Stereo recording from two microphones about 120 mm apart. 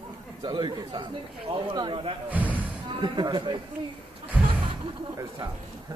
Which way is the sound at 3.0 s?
40° right (ahead or behind).